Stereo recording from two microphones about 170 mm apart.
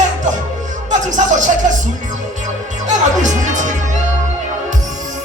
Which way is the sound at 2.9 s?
45° right (ahead or behind).